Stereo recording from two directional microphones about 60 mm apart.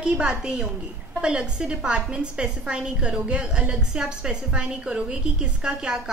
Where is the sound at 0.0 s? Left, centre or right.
Centre.